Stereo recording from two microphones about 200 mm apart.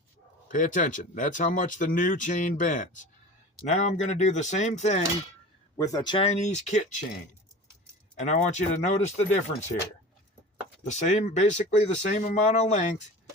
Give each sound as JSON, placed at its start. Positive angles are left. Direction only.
{"t": 0.4, "sound": "speech", "side_deg": 40}
{"t": 5.7, "sound": "speech", "side_deg": 15}
{"t": 8.2, "sound": "speech", "side_deg": 35}
{"t": 10.8, "sound": "speech", "side_deg": 35}